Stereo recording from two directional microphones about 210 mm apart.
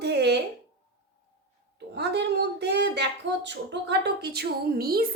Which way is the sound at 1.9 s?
55° right (ahead or behind).